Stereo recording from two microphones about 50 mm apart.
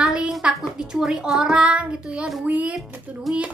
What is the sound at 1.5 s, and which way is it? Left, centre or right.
A child's voice, right.